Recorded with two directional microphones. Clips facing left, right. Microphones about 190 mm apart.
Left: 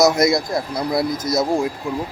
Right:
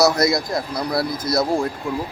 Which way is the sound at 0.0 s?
20° left (ahead or behind).